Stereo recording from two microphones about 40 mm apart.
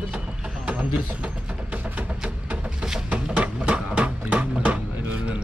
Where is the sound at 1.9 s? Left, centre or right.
Right.